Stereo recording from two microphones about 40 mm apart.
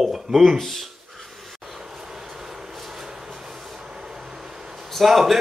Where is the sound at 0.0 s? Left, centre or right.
Centre.